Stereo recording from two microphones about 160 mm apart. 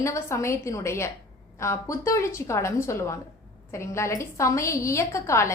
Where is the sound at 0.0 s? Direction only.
20° left (ahead or behind).